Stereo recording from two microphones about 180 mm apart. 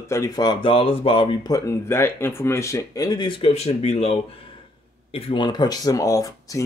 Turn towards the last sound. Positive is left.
turn(degrees=20)  # may be behind; listen again after turning